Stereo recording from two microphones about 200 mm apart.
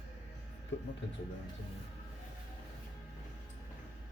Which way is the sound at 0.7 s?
65° left (ahead or behind).